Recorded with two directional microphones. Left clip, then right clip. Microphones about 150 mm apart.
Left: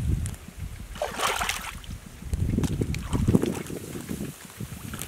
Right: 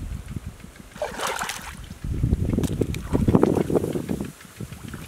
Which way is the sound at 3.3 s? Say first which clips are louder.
Right 8 dB; 40° right (ahead or behind).